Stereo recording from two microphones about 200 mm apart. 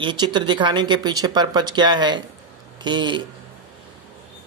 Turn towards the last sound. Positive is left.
turn(degrees=-20)  # may be behind; listen again after turning